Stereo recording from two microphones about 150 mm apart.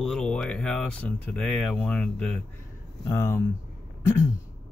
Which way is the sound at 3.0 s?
15° left (ahead or behind).